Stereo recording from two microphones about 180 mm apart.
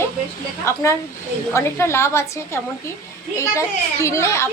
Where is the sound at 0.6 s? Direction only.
15° left (ahead or behind).